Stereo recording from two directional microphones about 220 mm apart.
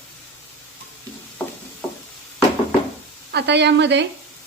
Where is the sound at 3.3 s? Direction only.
50° right (ahead or behind).